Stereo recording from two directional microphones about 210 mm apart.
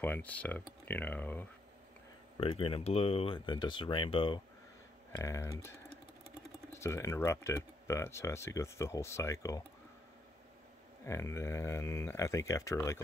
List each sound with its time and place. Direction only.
0.0 s speech: 5° left (ahead or behind)
2.3 s speech: 25° left (ahead or behind)
6.7 s speech: 15° left (ahead or behind)
11.1 s speech: 15° left (ahead or behind)